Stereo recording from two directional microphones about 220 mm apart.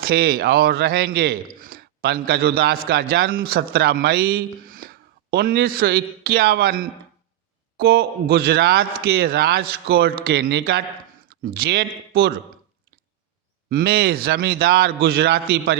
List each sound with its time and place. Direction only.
0.0 s a man's voice: 45° right (ahead or behind)
13.7 s a man's voice: 45° right (ahead or behind)